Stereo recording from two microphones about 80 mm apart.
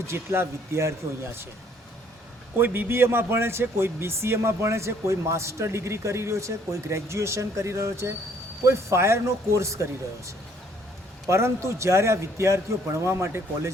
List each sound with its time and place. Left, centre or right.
0.1 s speech: right
2.6 s speech: right
11.3 s speech: right